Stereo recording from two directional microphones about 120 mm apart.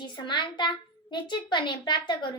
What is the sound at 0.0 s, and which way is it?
A child's voice, 40° left (ahead or behind).